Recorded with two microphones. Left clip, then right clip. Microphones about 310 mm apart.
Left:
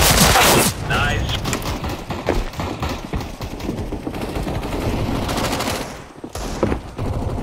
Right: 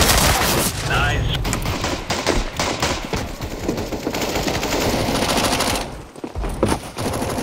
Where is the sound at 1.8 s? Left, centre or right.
Right.